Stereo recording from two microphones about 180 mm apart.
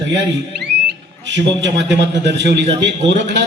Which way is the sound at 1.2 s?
85° right.